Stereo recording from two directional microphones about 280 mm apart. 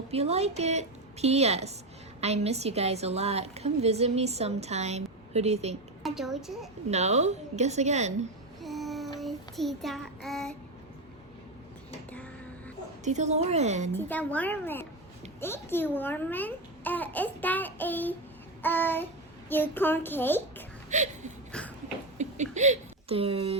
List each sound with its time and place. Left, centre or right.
0.1 s a woman's voice: right
6.0 s a woman's voice: centre
6.9 s a woman's voice: right
8.6 s child singing: centre
12.1 s a sound: centre
13.1 s a woman's voice: right
13.9 s a child's voice: centre
20.9 s a woman's voice: right
21.5 s a sound: centre
22.2 s speech: right